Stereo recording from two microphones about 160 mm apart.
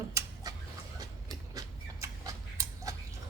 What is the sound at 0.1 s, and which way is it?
Chicken, 20° right (ahead or behind).